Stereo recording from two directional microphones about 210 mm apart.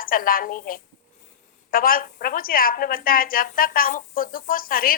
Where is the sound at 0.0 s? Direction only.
45° left (ahead or behind).